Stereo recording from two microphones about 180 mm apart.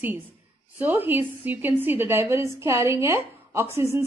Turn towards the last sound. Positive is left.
turn(degrees=-15)  # may be behind; listen again after turning